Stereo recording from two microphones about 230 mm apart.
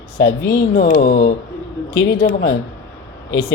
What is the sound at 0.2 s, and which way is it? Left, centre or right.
Speech, left.